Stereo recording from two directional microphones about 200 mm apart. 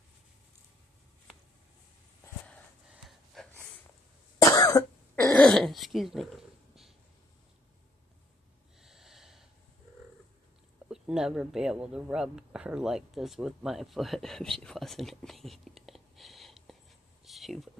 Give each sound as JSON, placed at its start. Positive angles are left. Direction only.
{"t": 2.2, "sound": "a sound", "side_deg": 5}
{"t": 2.9, "sound": "gasp", "side_deg": 0}
{"t": 4.4, "sound": "cough", "side_deg": 15}
{"t": 5.3, "sound": "throat clearing", "side_deg": 5}
{"t": 8.8, "sound": "snort", "side_deg": 0}
{"t": 10.9, "sound": "speech", "side_deg": -5}
{"t": 17.2, "sound": "a sound", "side_deg": 0}